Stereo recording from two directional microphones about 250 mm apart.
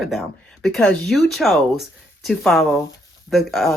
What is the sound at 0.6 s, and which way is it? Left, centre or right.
Speech, centre.